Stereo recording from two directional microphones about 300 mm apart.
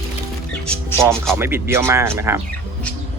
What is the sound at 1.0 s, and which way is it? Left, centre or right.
Speech, centre.